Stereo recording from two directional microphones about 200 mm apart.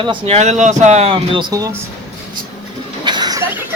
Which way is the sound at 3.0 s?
20° right (ahead or behind).